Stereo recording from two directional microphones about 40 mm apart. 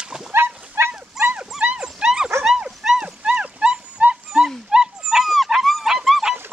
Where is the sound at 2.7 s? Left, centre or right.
Centre.